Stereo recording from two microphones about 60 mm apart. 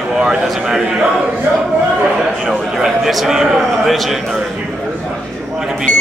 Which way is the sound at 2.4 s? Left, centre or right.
Centre.